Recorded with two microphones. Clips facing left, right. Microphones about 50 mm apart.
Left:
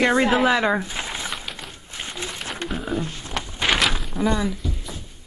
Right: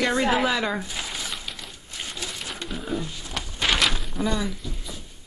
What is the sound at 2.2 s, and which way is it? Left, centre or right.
Wild animals, left.